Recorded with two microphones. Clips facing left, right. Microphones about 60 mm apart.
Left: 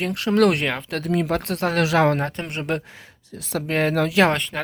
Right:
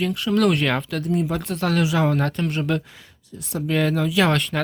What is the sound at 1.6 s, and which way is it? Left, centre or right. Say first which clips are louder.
Speech: right 1 dB; left.